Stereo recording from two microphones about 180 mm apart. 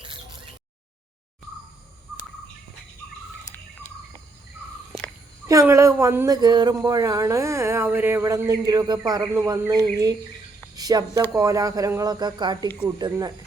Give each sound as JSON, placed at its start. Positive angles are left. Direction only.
{"t": 5.5, "sound": "speech", "side_deg": -15}